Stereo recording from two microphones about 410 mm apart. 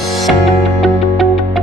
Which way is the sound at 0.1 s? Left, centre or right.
Centre.